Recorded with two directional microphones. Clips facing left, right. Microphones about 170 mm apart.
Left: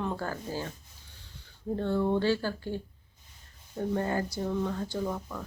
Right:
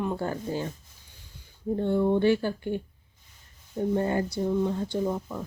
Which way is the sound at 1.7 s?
15° right (ahead or behind).